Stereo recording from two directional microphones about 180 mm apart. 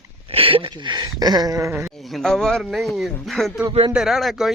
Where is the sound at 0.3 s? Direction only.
30° right (ahead or behind); by 1.9 s 15° right (ahead or behind).